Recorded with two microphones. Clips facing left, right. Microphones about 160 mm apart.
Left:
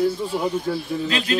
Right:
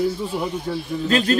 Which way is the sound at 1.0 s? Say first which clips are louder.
Right 6 dB; 45° right (ahead or behind).